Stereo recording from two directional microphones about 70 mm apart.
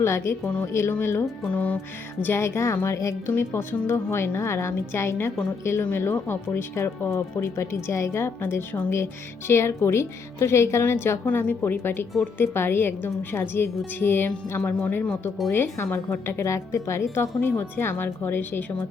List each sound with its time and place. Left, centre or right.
0.0 s speech: left
1.5 s music: centre
2.2 s speech: left
3.3 s speech: left